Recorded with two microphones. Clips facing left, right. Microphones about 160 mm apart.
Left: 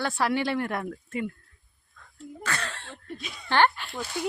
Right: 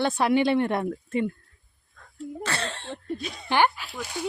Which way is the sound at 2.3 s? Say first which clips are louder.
Right 2 dB; 30° right (ahead or behind).